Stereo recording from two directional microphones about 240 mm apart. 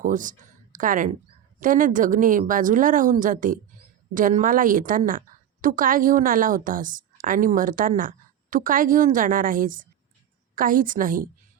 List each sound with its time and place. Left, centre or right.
0.0 s a woman's voice: right